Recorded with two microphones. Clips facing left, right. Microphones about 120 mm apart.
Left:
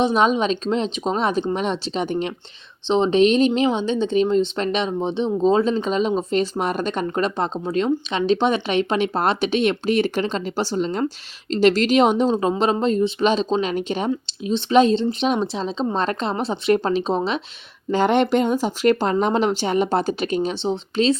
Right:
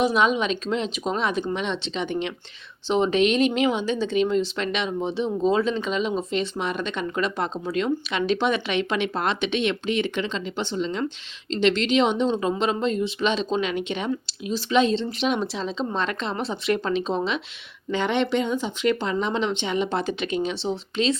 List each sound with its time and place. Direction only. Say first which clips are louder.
0.0 s speech: left 3 dB; 35° left (ahead or behind)
2.8 s speech: left 4 dB; 30° left (ahead or behind)
17.9 s speech: left 5 dB; 45° left (ahead or behind)